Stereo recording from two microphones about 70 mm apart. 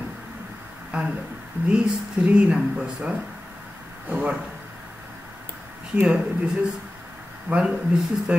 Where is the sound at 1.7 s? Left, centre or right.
Centre.